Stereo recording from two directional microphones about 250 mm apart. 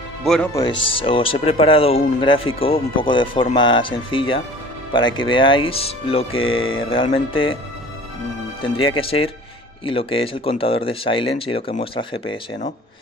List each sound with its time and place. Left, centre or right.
0.2 s speech: centre; by 7.5 s left
8.6 s speech: left